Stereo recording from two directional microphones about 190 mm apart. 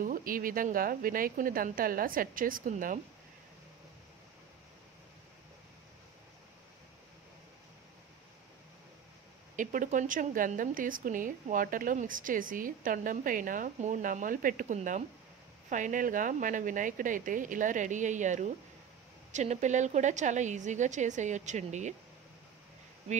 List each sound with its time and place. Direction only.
0.0 s a woman's voice: 45° right (ahead or behind)
9.6 s a woman's voice: 45° right (ahead or behind)